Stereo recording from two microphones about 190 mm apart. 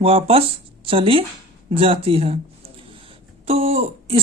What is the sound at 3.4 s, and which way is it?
Speech, 30° right (ahead or behind).